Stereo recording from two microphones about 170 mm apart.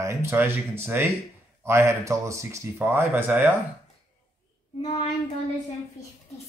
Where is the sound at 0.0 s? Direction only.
15° right (ahead or behind).